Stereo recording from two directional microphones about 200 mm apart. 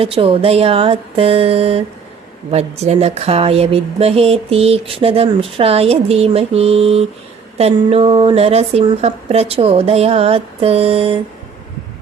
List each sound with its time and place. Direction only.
0.0 s speech: 30° right (ahead or behind)